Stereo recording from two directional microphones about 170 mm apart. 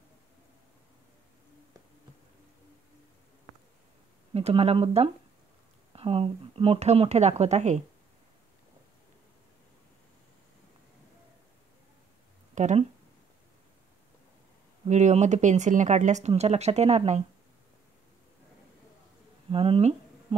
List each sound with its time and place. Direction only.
4.3 s a woman's voice: 35° right (ahead or behind)
12.5 s speech: 45° right (ahead or behind)
14.9 s speech: 45° right (ahead or behind)
19.5 s a sound: 35° right (ahead or behind)